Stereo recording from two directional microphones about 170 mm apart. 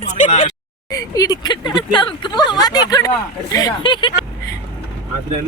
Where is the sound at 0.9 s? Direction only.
20° left (ahead or behind).